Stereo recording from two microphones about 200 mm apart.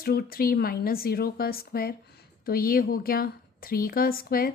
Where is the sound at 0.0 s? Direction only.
50° left (ahead or behind).